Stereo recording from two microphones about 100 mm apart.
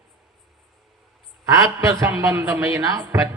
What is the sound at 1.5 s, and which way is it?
Speech, 35° right (ahead or behind).